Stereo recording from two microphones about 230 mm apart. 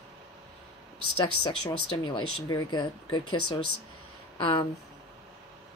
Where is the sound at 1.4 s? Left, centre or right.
Left.